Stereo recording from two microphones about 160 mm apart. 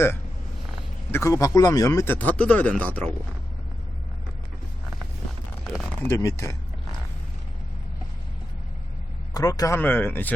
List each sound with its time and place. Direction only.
1.1 s speech: 20° left (ahead or behind)
2.1 s speech: 10° left (ahead or behind)
5.8 s speech: 10° left (ahead or behind)
9.3 s speech: 20° left (ahead or behind)